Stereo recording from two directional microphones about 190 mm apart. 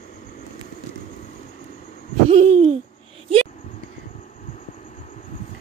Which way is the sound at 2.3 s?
30° right (ahead or behind).